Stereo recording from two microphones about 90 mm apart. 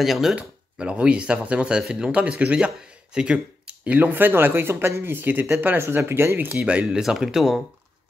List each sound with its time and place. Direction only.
0.0 s speech: centre (ahead or behind)
0.4 s speech: 10° right (ahead or behind)